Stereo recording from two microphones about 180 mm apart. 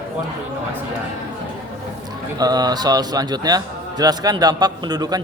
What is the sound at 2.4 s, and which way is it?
A man's voice, 20° right (ahead or behind).